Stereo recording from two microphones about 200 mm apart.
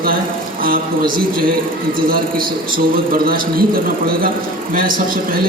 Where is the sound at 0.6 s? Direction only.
45° right (ahead or behind).